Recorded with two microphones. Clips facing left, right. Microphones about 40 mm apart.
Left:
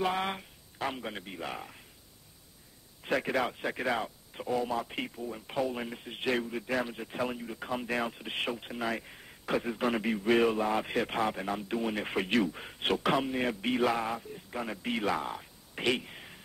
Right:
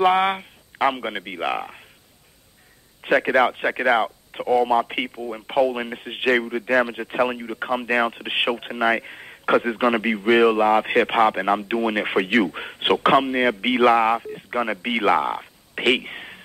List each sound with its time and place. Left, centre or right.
0.0 s speech: right
3.0 s speech: right